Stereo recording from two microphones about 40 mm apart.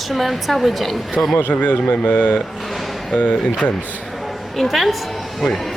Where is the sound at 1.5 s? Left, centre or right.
Left.